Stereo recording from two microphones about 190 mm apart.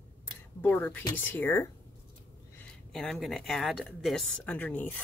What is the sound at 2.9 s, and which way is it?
Speech, centre (ahead or behind).